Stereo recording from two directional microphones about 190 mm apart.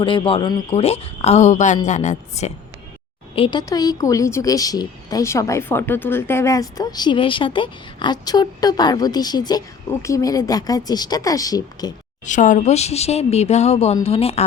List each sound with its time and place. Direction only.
0.0 s speech: 25° left (ahead or behind)
3.3 s speech: 25° left (ahead or behind)
12.2 s speech: 40° left (ahead or behind)